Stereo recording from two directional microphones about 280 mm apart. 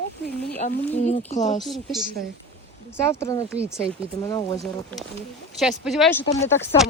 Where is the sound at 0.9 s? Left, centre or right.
Left.